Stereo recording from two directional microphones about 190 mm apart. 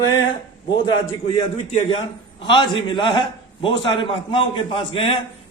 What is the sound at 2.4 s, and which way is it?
A man's voice, 25° left (ahead or behind).